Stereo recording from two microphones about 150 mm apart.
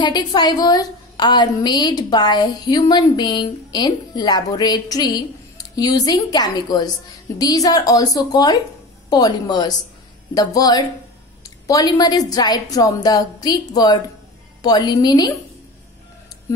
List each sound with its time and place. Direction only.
0.0 s a woman's voice: 30° left (ahead or behind)